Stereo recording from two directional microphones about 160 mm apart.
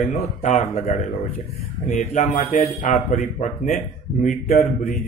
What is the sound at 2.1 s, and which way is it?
Speech, 50° left (ahead or behind).